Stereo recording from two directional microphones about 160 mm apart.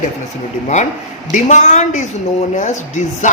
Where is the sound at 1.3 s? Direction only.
50° left (ahead or behind).